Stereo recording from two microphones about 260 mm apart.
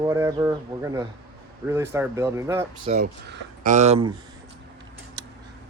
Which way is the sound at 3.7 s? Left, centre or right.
Right.